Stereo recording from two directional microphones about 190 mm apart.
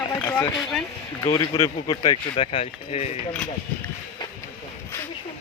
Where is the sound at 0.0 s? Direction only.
10° left (ahead or behind).